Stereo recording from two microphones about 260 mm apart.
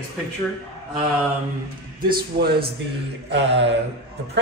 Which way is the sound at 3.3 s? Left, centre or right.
Right.